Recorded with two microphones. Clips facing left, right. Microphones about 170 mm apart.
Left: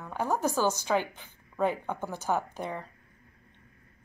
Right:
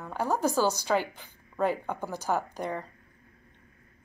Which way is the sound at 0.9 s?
5° left (ahead or behind).